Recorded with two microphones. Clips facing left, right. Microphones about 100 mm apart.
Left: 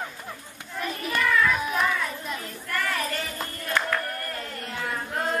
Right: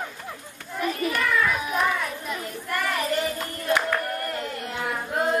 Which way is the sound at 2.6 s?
20° right (ahead or behind).